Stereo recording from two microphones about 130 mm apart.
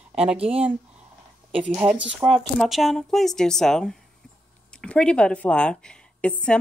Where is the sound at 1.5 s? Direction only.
10° right (ahead or behind).